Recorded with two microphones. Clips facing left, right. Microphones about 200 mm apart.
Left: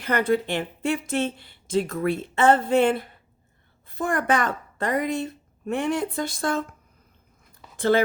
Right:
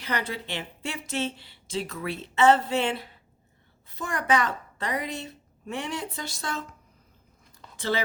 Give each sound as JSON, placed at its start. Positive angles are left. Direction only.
{"t": 0.0, "sound": "a woman's voice", "side_deg": 50}
{"t": 7.8, "sound": "speech", "side_deg": 55}